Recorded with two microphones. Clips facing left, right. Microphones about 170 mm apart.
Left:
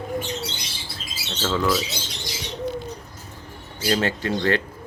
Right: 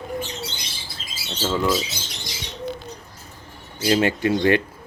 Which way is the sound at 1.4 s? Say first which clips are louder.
Right 1 dB; 5° right (ahead or behind).